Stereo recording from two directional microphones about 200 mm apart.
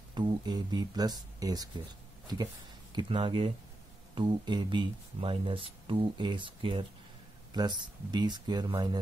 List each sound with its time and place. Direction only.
0.1 s speech: 20° right (ahead or behind)